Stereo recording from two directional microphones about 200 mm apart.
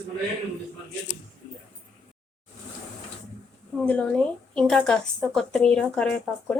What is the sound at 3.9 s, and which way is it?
Speech, 5° left (ahead or behind).